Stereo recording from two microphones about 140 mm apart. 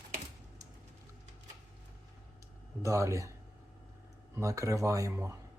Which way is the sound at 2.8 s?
20° right (ahead or behind).